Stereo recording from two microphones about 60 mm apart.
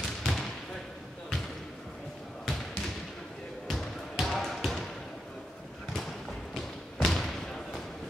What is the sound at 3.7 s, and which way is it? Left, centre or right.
Basketball bounce, centre.